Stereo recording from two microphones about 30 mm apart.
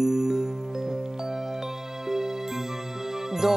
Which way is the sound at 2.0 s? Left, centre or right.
Centre.